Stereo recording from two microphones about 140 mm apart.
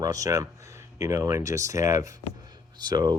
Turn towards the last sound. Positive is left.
turn(degrees=-30)  # may be behind; listen again after turning